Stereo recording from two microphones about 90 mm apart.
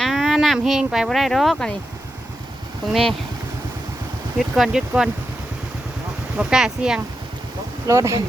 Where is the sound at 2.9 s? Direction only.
Centre (ahead or behind).